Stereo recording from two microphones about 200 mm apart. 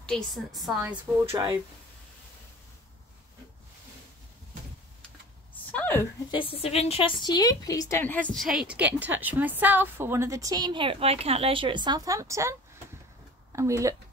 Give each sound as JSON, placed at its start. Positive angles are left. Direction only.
{"t": 0.0, "sound": "a woman's voice", "side_deg": 5}
{"t": 1.3, "sound": "a woman's voice", "side_deg": -15}
{"t": 5.7, "sound": "a sound", "side_deg": 10}
{"t": 6.3, "sound": "a woman's voice", "side_deg": 30}